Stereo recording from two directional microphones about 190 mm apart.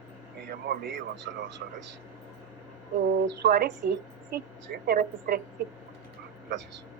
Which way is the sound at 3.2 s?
60° right (ahead or behind).